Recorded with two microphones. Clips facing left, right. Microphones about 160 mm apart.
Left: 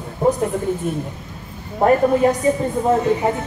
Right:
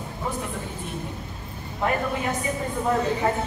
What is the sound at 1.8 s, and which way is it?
Speech, 45° left (ahead or behind).